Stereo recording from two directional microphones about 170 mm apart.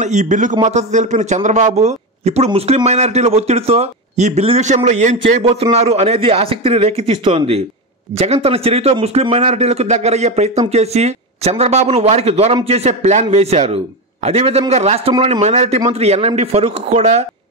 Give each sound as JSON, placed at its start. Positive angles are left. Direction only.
{"t": 0.0, "sound": "a man's voice", "side_deg": -45}